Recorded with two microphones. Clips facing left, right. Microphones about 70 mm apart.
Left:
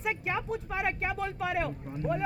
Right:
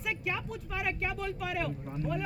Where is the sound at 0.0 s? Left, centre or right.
Left.